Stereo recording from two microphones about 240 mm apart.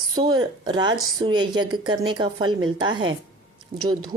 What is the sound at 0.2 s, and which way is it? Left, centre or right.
A woman's voice, centre.